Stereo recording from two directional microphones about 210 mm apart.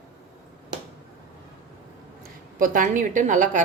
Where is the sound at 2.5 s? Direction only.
40° right (ahead or behind).